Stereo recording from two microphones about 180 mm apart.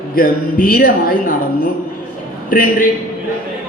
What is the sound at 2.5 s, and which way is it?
Speech, 50° left (ahead or behind).